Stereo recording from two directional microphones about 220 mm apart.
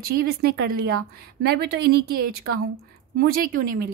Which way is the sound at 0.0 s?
45° right (ahead or behind).